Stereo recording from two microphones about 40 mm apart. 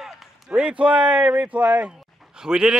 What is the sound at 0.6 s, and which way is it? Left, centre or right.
Speech, right.